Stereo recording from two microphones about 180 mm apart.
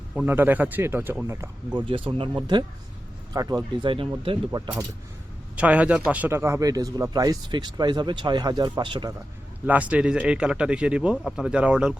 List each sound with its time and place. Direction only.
0.1 s speech: 10° right (ahead or behind)
1.9 s speech: 30° right (ahead or behind)
5.5 s speech: 5° right (ahead or behind); by 9.1 s 25° right (ahead or behind)
9.6 s speech: 10° right (ahead or behind)